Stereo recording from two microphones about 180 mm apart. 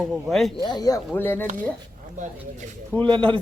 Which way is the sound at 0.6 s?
20° left (ahead or behind).